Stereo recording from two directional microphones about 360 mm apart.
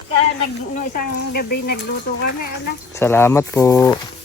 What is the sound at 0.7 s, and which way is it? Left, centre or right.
Speech, left.